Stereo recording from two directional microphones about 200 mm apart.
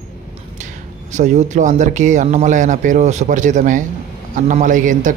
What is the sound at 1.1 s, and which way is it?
Speech, 35° right (ahead or behind).